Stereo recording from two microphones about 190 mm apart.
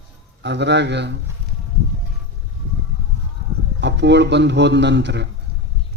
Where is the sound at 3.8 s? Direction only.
65° right (ahead or behind).